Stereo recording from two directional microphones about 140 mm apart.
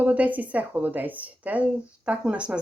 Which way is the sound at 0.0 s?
10° right (ahead or behind).